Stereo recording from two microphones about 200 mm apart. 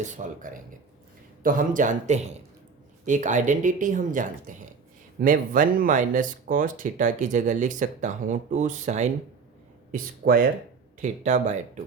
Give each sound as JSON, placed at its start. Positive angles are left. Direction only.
{"t": 0.0, "sound": "speech", "side_deg": -40}
{"t": 9.9, "sound": "speech", "side_deg": -45}
{"t": 11.0, "sound": "speech", "side_deg": -35}